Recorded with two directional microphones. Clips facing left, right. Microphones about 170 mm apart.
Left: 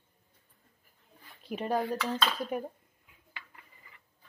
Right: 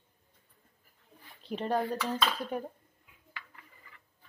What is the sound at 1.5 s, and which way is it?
Speech, 10° left (ahead or behind).